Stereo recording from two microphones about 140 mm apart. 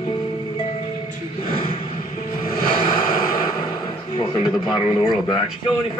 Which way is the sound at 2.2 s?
90° left.